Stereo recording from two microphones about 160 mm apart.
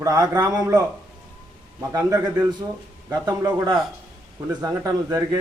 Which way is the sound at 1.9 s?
20° right (ahead or behind).